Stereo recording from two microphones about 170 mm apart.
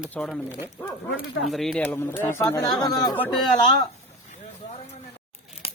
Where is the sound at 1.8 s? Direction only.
15° left (ahead or behind).